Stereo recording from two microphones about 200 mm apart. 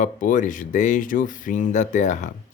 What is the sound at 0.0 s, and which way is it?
Speech, 40° left (ahead or behind).